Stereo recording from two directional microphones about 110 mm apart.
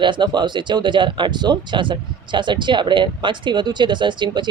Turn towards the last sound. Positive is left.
turn(degrees=-45)  # may be behind; listen again after turning